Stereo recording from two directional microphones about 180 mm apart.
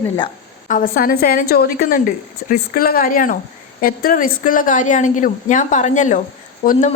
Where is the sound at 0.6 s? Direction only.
50° left (ahead or behind).